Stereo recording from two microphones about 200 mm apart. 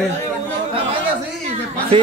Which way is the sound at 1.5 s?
30° right (ahead or behind).